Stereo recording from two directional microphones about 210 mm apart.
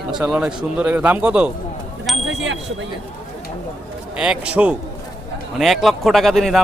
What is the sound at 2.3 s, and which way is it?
Speech, 65° right (ahead or behind).